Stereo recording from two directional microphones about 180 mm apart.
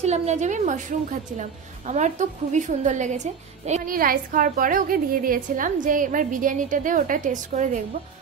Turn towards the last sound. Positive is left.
turn(degrees=-45)  # may be behind; listen again after turning